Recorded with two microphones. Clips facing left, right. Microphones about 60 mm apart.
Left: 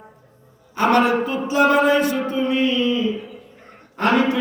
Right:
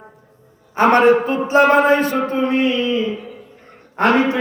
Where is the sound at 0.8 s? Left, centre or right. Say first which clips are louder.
Right 5 dB; right.